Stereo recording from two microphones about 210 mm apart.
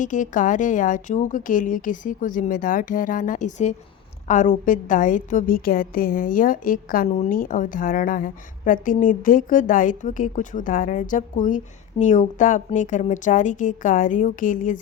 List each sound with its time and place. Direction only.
0.0 s a woman's voice: 35° left (ahead or behind)